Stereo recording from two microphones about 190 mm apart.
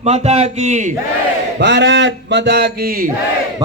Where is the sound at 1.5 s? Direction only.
65° right (ahead or behind).